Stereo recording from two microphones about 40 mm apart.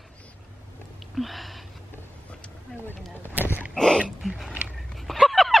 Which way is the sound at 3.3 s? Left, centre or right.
Right.